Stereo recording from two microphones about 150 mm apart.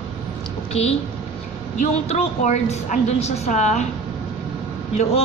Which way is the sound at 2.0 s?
50° left (ahead or behind).